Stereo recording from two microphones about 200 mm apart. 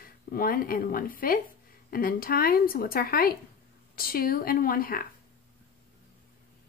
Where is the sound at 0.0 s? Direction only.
45° left (ahead or behind).